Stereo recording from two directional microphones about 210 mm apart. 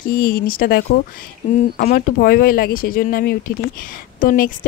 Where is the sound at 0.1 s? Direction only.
45° left (ahead or behind).